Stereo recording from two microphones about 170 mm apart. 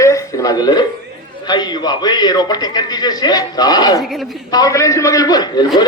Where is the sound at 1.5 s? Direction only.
25° left (ahead or behind).